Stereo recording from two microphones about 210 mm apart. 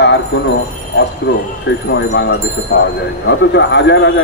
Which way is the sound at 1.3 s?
60° left (ahead or behind).